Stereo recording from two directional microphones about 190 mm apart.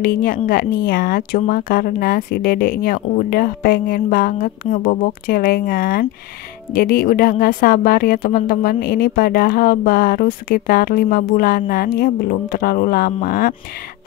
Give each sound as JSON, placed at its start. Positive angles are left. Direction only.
{"t": 0.0, "sound": "a woman's voice", "side_deg": 50}